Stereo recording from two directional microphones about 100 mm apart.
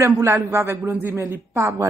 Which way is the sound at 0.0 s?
30° right (ahead or behind).